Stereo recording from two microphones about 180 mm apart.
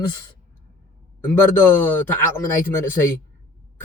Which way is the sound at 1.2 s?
15° left (ahead or behind).